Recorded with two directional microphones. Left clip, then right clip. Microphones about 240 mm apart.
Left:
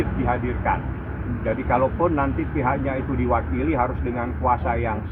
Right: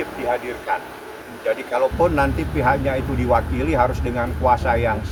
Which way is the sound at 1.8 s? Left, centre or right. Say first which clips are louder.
Right 3 dB; centre.